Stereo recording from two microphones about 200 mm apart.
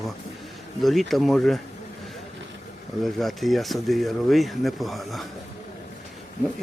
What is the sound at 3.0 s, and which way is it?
Speech, centre (ahead or behind).